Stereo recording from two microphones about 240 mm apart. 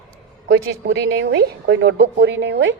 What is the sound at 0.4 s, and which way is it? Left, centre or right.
A woman's voice, right.